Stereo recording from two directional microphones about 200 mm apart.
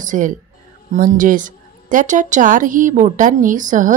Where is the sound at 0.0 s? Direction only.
40° right (ahead or behind).